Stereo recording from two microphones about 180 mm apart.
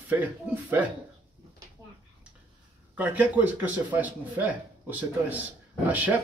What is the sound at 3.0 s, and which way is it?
Speech, 10° right (ahead or behind).